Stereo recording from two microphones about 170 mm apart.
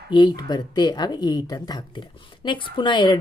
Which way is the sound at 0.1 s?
25° left (ahead or behind).